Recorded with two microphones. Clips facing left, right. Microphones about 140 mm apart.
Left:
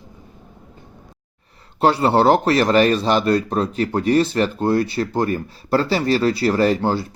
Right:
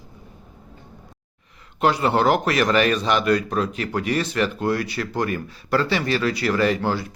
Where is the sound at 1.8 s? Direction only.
35° left (ahead or behind).